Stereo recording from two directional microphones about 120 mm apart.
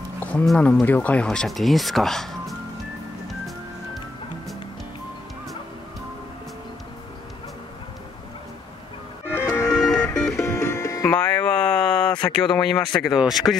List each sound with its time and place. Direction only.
0.2 s a sound: 15° left (ahead or behind)
0.5 s speech: 5° left (ahead or behind)
9.3 s music: 25° left (ahead or behind)
9.8 s music: 5° left (ahead or behind)
10.3 s music: 20° left (ahead or behind)
11.1 s a sound: 10° left (ahead or behind)
12.4 s speech: 5° left (ahead or behind)